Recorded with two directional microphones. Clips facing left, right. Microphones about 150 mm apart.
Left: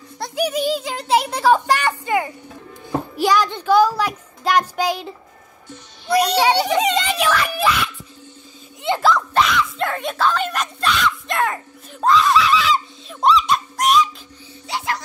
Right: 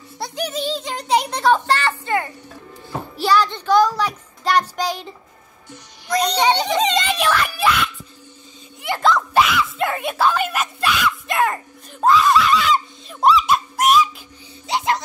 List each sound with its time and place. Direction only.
0.4 s speech: 10° left (ahead or behind)
6.1 s speech: 10° left (ahead or behind)
8.8 s a sound: 25° left (ahead or behind)
9.3 s speech: 5° right (ahead or behind)
14.7 s music: 20° right (ahead or behind)